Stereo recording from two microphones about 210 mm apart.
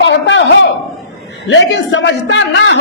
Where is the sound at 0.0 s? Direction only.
60° left (ahead or behind).